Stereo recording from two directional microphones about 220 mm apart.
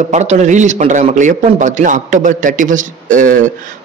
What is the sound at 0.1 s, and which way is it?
A man's voice, 30° right (ahead or behind).